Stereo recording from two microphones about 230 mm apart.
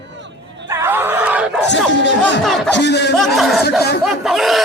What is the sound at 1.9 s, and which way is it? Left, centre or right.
Music, left.